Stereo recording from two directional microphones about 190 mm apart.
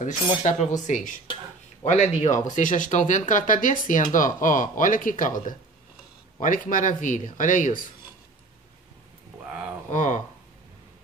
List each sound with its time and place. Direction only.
0.3 s speech: 35° left (ahead or behind)
6.4 s speech: 45° left (ahead or behind)
9.8 s speech: 40° left (ahead or behind)